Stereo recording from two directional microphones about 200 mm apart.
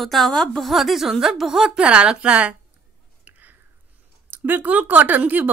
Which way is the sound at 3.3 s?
10° right (ahead or behind).